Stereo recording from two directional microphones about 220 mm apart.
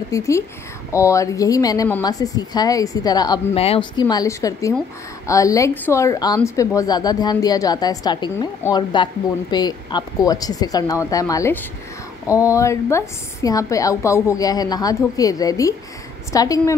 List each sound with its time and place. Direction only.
0.1 s a woman's voice: 15° left (ahead or behind)